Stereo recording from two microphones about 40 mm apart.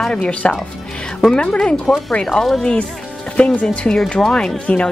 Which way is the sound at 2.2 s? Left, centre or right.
Centre.